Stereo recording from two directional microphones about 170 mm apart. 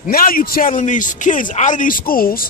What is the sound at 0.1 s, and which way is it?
Speech, 55° left (ahead or behind).